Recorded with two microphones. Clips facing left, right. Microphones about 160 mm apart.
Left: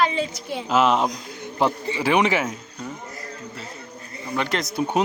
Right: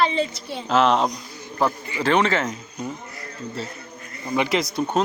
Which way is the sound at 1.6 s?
25° left (ahead or behind).